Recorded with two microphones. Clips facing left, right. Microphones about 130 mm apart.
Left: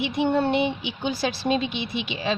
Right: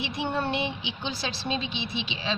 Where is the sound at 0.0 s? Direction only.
55° left (ahead or behind).